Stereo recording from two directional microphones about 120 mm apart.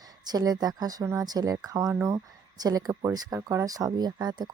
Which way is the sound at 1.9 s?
20° right (ahead or behind).